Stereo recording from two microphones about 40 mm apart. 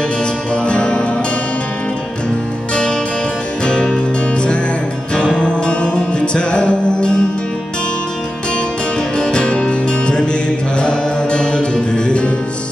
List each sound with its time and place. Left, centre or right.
0.2 s music: left
2.7 s music: centre
9.1 s music: left